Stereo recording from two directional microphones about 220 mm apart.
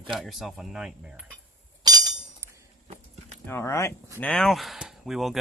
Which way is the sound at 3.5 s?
10° left (ahead or behind).